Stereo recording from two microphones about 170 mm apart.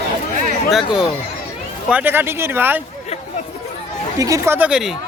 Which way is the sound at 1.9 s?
10° right (ahead or behind).